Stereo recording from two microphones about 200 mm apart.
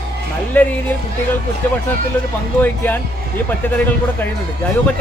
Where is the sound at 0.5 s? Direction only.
10° left (ahead or behind).